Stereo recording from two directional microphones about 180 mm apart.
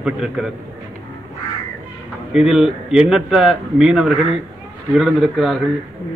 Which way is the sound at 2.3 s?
Centre (ahead or behind).